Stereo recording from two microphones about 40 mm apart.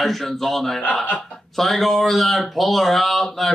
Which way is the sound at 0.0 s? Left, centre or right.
Centre.